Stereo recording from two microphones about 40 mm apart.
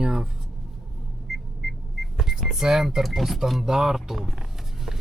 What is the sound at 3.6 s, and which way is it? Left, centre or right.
Speech, centre.